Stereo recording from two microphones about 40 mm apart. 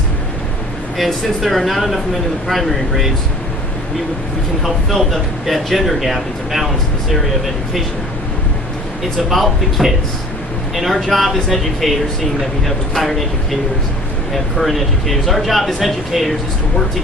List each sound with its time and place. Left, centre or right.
0.9 s speech: centre
4.6 s speech: centre
9.3 s speech: centre